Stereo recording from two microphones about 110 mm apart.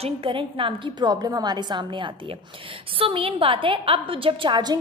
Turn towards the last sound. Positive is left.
turn(degrees=-40)  # may be behind; listen again after turning